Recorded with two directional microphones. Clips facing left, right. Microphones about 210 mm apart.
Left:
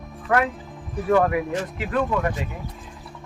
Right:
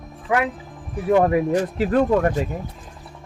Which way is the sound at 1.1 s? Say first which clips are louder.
Right 3 dB; 25° right (ahead or behind).